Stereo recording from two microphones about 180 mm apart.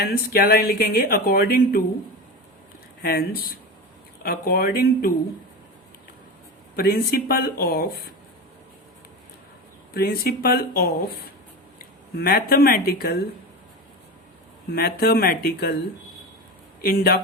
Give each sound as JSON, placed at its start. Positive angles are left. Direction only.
{"t": 0.0, "sound": "speech", "side_deg": 55}
{"t": 3.0, "sound": "speech", "side_deg": 60}
{"t": 6.7, "sound": "speech", "side_deg": 60}
{"t": 9.9, "sound": "speech", "side_deg": 55}
{"t": 12.1, "sound": "speech", "side_deg": 55}
{"t": 14.7, "sound": "speech", "side_deg": 60}
{"t": 16.8, "sound": "speech", "side_deg": 60}